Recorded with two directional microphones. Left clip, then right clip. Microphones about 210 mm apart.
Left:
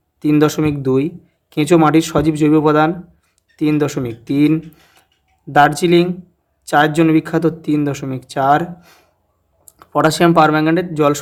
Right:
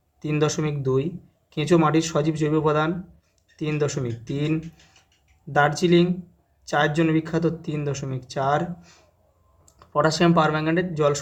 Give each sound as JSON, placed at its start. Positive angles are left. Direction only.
{"t": 0.2, "sound": "speech", "side_deg": 35}